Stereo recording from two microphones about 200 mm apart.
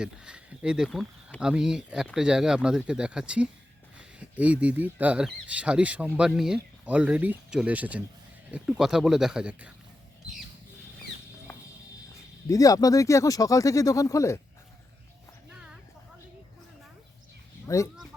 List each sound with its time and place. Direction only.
0.0 s speech: 5° right (ahead or behind)
11.5 s a sound: 10° left (ahead or behind)
12.5 s speech: 15° left (ahead or behind)
17.7 s speech: 15° left (ahead or behind)